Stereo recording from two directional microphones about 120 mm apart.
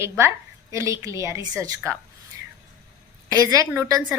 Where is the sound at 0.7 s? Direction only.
25° right (ahead or behind).